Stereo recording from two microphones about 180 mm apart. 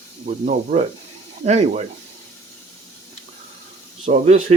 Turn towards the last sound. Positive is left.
turn(degrees=-40)  # may be behind; listen again after turning